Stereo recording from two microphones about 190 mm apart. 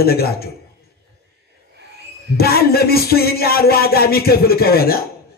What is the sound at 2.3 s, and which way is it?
Speech, 55° left (ahead or behind).